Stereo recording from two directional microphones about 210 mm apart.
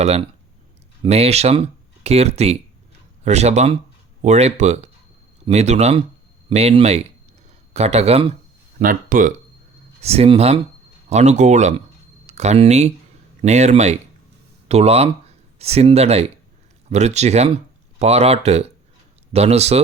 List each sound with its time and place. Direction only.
0.0 s speech: 30° right (ahead or behind)
8.8 s speech: 40° right (ahead or behind)
10.0 s speech: 30° right (ahead or behind)